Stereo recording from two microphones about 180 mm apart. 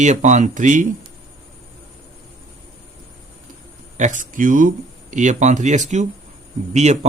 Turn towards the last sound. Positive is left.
turn(degrees=-40)  # may be behind; listen again after turning